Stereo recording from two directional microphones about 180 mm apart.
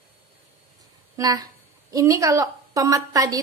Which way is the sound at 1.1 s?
20° right (ahead or behind).